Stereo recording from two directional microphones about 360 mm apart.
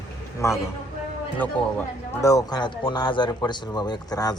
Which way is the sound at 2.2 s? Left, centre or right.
Centre.